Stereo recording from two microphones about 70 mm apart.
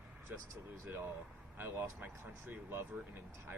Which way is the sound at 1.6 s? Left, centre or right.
Right.